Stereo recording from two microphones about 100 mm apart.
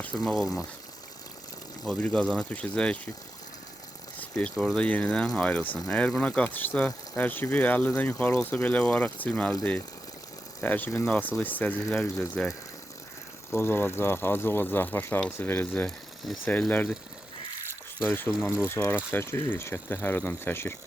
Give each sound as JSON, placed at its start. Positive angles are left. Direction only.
{"t": 0.0, "sound": "speech", "side_deg": 10}
{"t": 1.8, "sound": "speech", "side_deg": 10}
{"t": 4.2, "sound": "a sound", "side_deg": 15}
{"t": 4.5, "sound": "speech", "side_deg": 5}
{"t": 10.6, "sound": "speech", "side_deg": 15}
{"t": 13.5, "sound": "speech", "side_deg": 25}
{"t": 18.1, "sound": "speech", "side_deg": 20}